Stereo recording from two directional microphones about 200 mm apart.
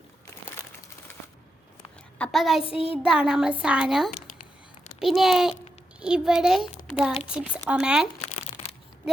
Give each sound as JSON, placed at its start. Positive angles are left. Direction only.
{"t": 2.1, "sound": "a woman's voice", "side_deg": 5}
{"t": 2.6, "sound": "child singing", "side_deg": 30}
{"t": 3.0, "sound": "a child's voice", "side_deg": -5}